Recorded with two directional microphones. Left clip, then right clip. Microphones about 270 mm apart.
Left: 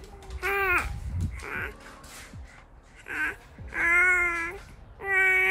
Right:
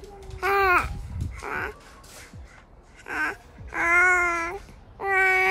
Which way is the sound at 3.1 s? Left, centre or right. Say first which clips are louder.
Right 2 dB; centre.